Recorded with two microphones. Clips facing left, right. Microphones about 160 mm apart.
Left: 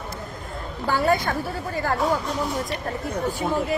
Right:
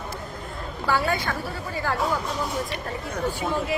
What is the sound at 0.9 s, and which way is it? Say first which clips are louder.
Speech: left 3 dB; 40° left (ahead or behind).